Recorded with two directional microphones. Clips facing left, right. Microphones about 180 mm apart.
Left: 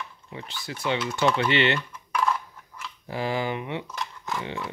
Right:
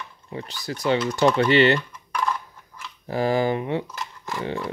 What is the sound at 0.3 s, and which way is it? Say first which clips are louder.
Speech: right 7 dB; 40° right (ahead or behind).